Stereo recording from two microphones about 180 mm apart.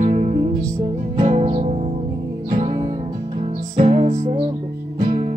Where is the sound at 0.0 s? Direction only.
45° right (ahead or behind).